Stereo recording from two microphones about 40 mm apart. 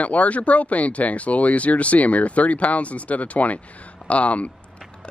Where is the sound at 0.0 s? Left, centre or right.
Left.